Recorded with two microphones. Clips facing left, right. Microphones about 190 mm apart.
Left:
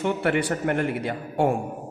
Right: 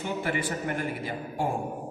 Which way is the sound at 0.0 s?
70° left (ahead or behind).